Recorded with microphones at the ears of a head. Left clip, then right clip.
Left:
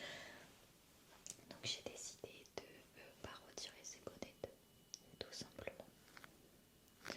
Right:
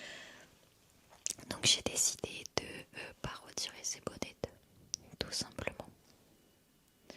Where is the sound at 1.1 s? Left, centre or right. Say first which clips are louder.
Right 15 dB; right.